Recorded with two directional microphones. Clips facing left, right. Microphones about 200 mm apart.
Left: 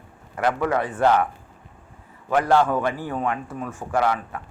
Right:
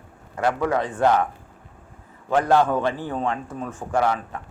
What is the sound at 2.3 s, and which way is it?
A man's voice, 20° right (ahead or behind).